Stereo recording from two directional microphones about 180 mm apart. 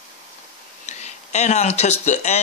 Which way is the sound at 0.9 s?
40° left (ahead or behind).